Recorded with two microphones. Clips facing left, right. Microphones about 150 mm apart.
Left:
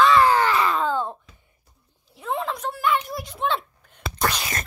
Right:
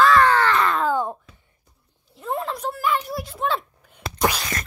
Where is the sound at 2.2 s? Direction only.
Centre (ahead or behind).